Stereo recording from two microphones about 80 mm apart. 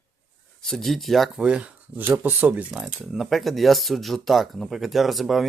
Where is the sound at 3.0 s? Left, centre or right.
Centre.